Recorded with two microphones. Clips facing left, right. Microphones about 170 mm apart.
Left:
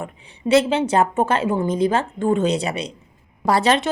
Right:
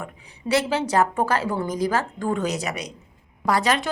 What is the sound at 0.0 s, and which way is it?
A woman's voice, 25° left (ahead or behind).